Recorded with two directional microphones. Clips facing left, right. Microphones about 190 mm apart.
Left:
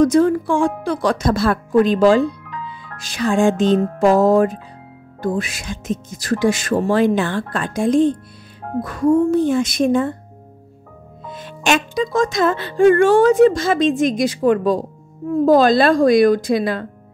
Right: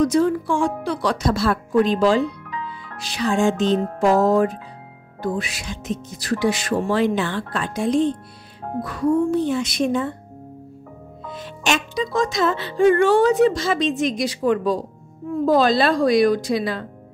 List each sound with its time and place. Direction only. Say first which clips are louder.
0.0 s speech: left 4 dB; 50° left (ahead or behind)
11.2 s speech: left 4 dB; 50° left (ahead or behind)